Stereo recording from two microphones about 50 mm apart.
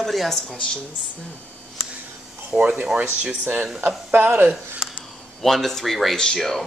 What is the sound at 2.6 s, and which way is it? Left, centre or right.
Speech, right.